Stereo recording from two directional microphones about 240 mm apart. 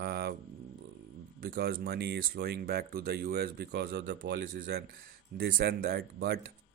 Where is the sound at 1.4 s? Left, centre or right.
Right.